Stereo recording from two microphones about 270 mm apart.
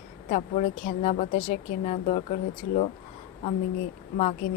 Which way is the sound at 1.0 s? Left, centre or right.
Left.